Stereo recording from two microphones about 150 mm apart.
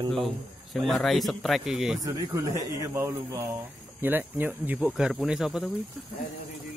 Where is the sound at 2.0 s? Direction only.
25° right (ahead or behind); by 5.7 s centre (ahead or behind).